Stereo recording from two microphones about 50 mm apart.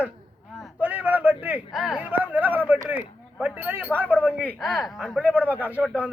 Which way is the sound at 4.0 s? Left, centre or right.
Left.